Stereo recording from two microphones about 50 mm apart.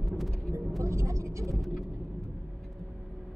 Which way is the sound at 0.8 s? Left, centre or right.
Right.